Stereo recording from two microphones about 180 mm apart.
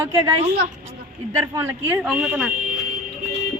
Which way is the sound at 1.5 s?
15° right (ahead or behind).